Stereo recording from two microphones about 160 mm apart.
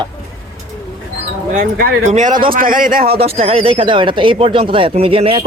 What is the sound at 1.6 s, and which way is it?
Speech, 65° right (ahead or behind).